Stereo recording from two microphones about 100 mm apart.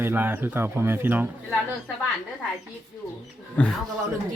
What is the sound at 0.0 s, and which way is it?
A man's voice, 20° right (ahead or behind).